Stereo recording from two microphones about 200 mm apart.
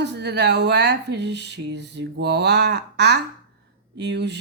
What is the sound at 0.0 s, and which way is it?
Speech, 60° right (ahead or behind).